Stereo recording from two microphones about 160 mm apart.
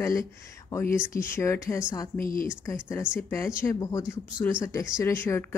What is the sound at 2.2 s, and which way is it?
Speech, 60° left (ahead or behind).